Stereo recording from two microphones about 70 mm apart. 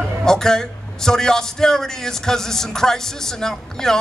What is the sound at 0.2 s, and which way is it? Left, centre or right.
A man's voice, centre.